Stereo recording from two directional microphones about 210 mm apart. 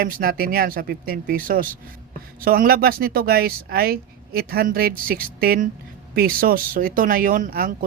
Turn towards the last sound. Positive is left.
turn(degrees=-45)  # may be behind; listen again after turning